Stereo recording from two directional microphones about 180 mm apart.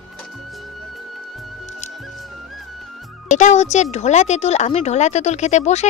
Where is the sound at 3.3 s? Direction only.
40° left (ahead or behind).